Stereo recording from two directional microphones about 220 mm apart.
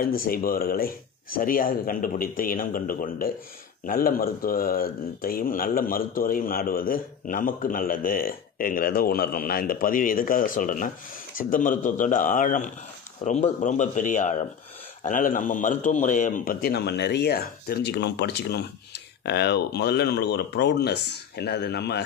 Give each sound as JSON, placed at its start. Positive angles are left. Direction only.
{"t": 0.2, "sound": "a man's voice", "side_deg": 40}